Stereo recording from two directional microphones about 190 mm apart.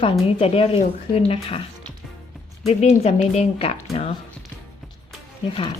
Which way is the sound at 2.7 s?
35° left (ahead or behind).